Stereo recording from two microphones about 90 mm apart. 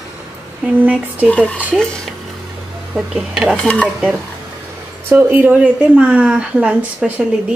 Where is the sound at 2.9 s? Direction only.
5° right (ahead or behind).